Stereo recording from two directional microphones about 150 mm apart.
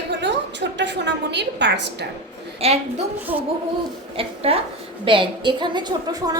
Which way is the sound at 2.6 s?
40° right (ahead or behind).